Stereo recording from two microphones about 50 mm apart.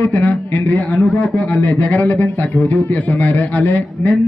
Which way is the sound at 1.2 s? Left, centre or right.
Centre.